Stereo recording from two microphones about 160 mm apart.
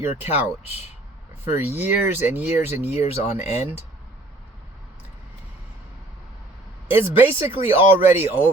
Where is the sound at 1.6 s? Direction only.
10° right (ahead or behind).